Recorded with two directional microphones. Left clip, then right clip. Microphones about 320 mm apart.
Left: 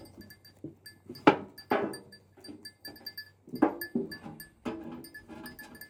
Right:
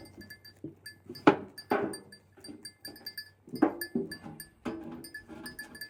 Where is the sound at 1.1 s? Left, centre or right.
Centre.